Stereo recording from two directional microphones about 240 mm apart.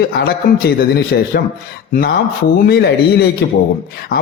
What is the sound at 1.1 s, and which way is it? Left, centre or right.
Speech, left.